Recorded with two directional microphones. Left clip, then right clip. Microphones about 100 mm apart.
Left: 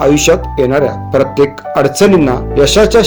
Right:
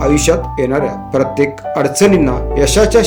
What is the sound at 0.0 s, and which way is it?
Speech, 40° left (ahead or behind).